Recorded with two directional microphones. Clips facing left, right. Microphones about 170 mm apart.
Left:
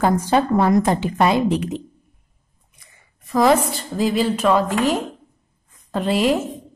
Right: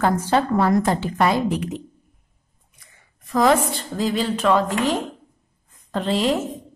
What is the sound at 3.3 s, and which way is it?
A woman's voice, 10° left (ahead or behind).